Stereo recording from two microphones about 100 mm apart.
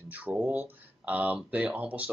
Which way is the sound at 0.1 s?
20° right (ahead or behind).